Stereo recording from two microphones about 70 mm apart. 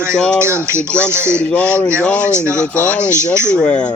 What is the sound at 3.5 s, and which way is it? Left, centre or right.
Speech, centre.